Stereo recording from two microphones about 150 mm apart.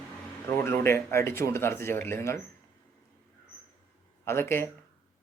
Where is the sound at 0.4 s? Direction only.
15° left (ahead or behind).